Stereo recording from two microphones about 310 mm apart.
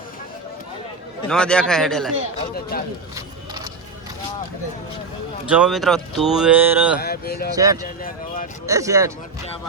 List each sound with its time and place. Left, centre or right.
1.3 s speech: centre
2.6 s speech: left
5.5 s speech: centre
7.0 s speech: left
7.5 s speech: centre